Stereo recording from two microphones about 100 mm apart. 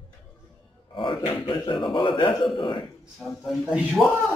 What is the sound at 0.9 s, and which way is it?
Speech, 60° left (ahead or behind).